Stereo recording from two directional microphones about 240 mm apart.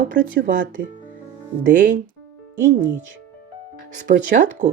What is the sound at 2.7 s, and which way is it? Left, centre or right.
Speech, right.